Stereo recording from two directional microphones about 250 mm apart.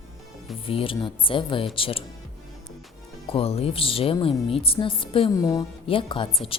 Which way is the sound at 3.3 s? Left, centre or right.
Left.